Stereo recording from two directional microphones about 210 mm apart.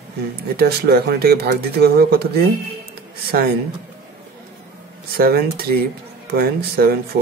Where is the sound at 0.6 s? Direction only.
50° right (ahead or behind).